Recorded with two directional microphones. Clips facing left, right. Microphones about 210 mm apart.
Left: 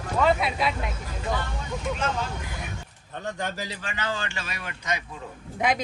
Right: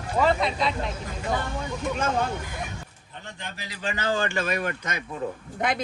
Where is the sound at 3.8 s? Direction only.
40° right (ahead or behind).